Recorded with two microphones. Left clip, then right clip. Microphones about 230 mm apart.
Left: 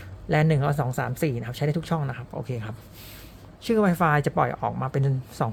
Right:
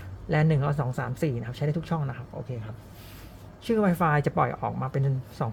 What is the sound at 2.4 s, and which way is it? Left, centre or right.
Speech, left.